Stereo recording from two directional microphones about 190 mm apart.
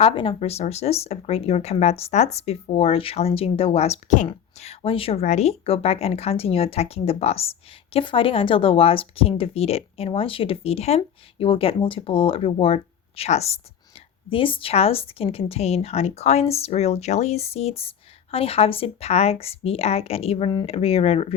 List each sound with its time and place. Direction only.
0.0 s a woman's voice: 25° left (ahead or behind)